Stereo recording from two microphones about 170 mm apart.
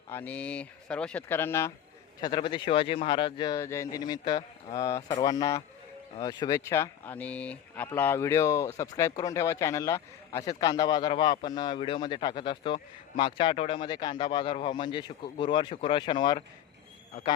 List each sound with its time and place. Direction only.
0.1 s speech: 10° left (ahead or behind)
2.2 s speech: 30° left (ahead or behind)